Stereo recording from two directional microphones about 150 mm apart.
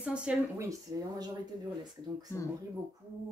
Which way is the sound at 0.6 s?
25° right (ahead or behind).